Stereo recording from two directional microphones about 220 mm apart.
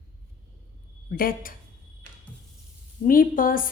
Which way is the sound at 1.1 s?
40° left (ahead or behind).